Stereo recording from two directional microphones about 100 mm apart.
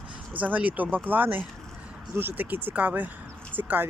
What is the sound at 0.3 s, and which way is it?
Speech, 15° right (ahead or behind).